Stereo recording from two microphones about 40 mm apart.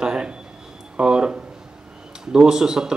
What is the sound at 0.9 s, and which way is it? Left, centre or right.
Speech, right.